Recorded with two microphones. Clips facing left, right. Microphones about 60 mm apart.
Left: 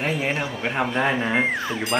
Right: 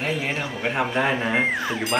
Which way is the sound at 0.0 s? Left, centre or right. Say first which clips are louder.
Left 2 dB; centre.